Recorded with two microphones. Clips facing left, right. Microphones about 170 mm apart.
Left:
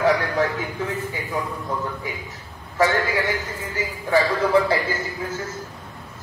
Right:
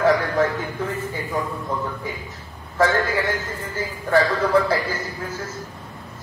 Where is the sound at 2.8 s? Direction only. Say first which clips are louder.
Right 1 dB; centre (ahead or behind).